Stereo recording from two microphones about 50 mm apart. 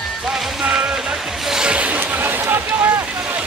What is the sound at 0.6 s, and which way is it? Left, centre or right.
Speech, centre.